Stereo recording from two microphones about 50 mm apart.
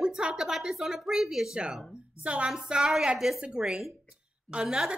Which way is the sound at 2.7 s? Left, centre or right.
Centre.